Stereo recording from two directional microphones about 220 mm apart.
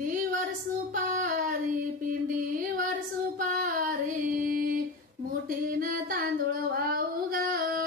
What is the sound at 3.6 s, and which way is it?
Female singing, 40° right (ahead or behind).